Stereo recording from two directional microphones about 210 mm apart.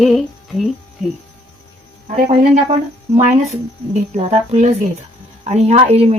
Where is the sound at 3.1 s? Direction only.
30° right (ahead or behind).